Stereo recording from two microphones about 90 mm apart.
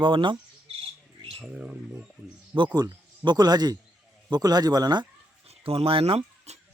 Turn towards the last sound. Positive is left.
turn(degrees=-90)